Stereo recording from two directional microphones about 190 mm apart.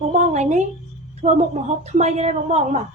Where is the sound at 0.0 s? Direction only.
40° right (ahead or behind).